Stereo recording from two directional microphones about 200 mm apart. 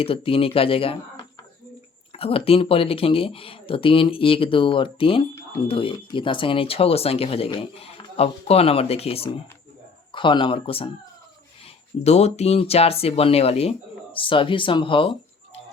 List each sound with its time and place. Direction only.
0.0 s speech: 25° left (ahead or behind)
12.0 s speech: 30° left (ahead or behind)